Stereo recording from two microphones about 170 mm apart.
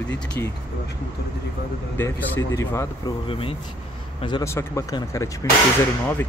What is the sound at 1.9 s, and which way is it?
Speech, 15° left (ahead or behind).